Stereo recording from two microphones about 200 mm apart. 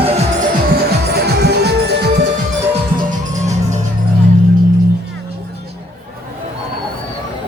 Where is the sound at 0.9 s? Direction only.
55° right (ahead or behind).